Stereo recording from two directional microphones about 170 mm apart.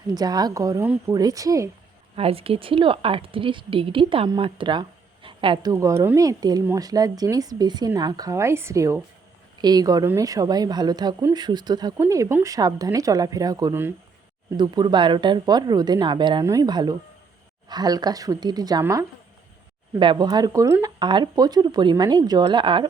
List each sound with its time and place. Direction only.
0.1 s a woman's voice: 25° right (ahead or behind)
2.1 s a woman's voice: 35° right (ahead or behind)